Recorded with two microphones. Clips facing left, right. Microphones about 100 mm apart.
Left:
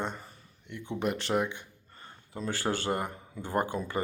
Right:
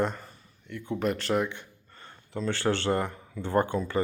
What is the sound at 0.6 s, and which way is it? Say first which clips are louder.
Speech: right 3 dB; 20° left (ahead or behind).